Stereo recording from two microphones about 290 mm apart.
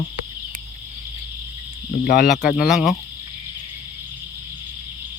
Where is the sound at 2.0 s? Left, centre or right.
Left.